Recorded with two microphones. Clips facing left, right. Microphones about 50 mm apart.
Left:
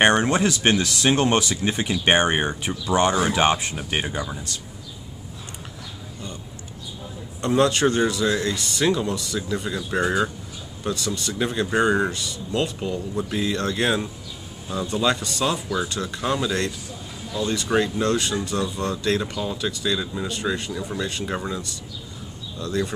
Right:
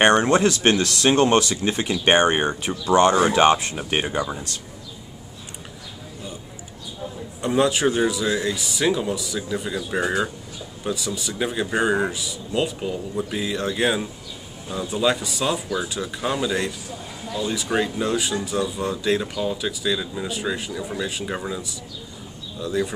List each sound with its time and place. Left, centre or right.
0.0 s speech: centre
2.5 s speech: centre
3.2 s speech: centre
3.4 s speech: centre
3.7 s speech: centre
4.1 s speech: centre
7.4 s speech: centre